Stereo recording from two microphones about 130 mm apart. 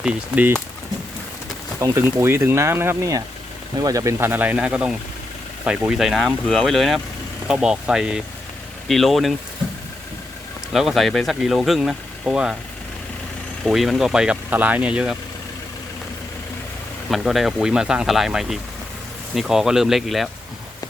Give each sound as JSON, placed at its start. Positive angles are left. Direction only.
{"t": 0.0, "sound": "speech", "side_deg": -5}
{"t": 1.8, "sound": "speech", "side_deg": -20}
{"t": 10.7, "sound": "speech", "side_deg": 0}
{"t": 13.7, "sound": "speech", "side_deg": 0}
{"t": 17.1, "sound": "speech", "side_deg": 0}